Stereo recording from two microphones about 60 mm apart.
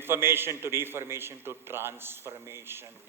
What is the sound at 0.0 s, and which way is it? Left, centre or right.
A man's voice, right.